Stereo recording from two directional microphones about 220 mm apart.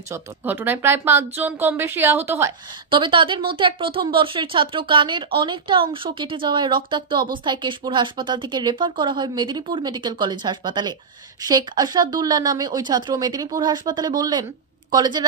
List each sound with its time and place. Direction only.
0.1 s speech: 10° right (ahead or behind)
2.9 s a woman's voice: 20° right (ahead or behind)